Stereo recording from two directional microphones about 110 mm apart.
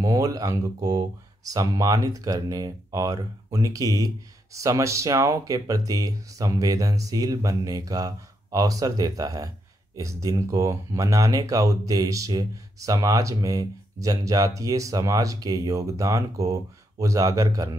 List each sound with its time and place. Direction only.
0.0 s speech: 35° right (ahead or behind)